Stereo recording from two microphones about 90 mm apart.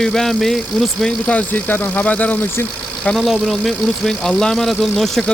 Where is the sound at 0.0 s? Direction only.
5° left (ahead or behind).